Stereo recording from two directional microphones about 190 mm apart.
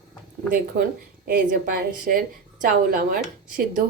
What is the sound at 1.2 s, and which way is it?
A woman's voice, 50° right (ahead or behind).